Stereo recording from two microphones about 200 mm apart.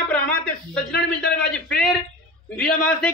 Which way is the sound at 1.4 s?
5° left (ahead or behind).